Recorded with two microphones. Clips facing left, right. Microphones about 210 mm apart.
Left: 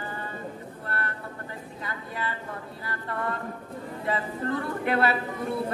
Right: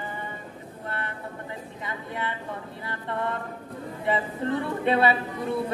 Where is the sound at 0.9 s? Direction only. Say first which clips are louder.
Even; 20° right (ahead or behind).